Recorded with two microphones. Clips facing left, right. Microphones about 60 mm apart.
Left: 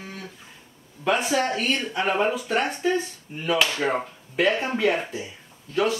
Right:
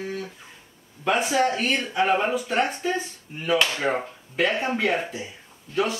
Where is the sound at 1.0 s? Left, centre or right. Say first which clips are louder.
Right 1 dB; centre.